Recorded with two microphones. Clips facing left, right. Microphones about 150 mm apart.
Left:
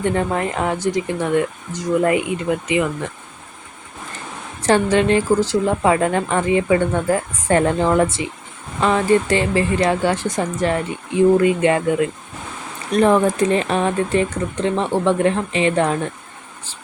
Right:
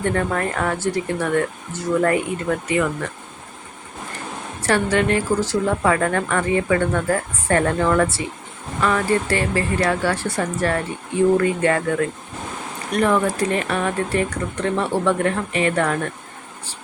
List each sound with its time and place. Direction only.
0.0 s speech: 20° left (ahead or behind)
4.6 s a woman's voice: 20° left (ahead or behind)